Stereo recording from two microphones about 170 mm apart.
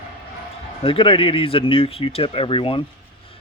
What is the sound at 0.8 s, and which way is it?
Speech, 30° left (ahead or behind).